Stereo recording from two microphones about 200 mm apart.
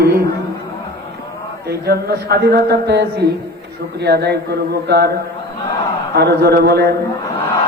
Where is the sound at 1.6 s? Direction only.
50° right (ahead or behind).